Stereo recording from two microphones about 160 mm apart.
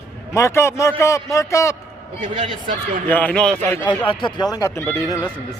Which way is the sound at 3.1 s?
10° left (ahead or behind).